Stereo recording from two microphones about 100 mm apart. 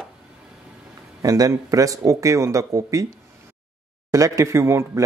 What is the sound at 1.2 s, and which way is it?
Speech, 35° right (ahead or behind).